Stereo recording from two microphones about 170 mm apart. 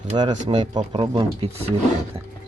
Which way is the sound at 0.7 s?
30° right (ahead or behind).